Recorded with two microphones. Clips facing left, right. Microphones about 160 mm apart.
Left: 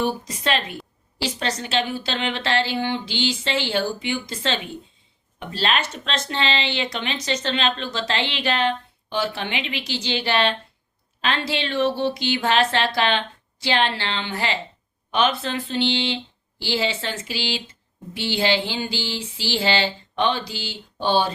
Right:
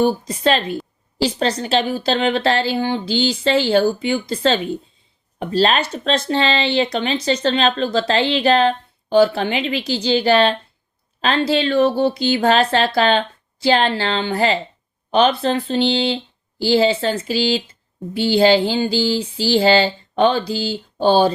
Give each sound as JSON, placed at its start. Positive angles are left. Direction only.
{"t": 0.0, "sound": "speech", "side_deg": -35}